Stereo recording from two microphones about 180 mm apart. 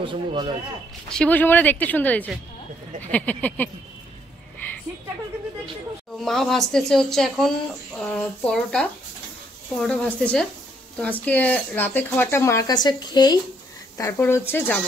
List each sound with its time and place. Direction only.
0.0 s speech: 30° right (ahead or behind)
1.0 s speech: 5° left (ahead or behind)
6.2 s speech: centre (ahead or behind)